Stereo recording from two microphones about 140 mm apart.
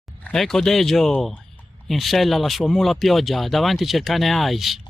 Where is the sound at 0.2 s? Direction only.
5° left (ahead or behind).